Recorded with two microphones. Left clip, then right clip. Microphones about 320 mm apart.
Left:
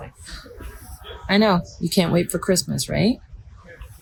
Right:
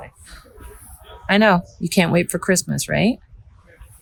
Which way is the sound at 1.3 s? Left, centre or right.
Right.